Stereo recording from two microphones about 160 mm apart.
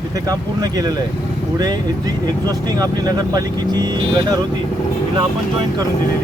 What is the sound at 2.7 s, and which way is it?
Speech, 25° right (ahead or behind).